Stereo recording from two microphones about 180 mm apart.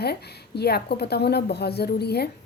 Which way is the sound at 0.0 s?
65° left (ahead or behind).